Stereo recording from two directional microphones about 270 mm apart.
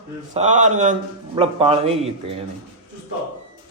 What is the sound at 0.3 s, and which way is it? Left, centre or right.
A man's voice, right.